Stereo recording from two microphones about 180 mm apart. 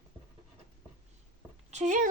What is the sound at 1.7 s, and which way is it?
Speech, 40° right (ahead or behind).